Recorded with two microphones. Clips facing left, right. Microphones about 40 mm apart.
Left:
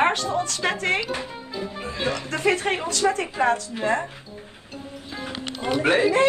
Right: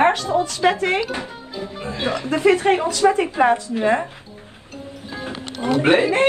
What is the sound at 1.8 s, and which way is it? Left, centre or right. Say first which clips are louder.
A woman's voice: right 5 dB; right.